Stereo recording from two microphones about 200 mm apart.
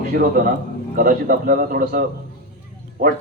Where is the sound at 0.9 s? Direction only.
45° right (ahead or behind).